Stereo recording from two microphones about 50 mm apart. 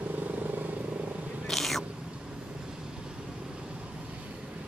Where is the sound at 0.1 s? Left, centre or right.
Right.